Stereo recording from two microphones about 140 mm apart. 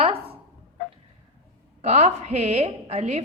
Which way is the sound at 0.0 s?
40° right (ahead or behind).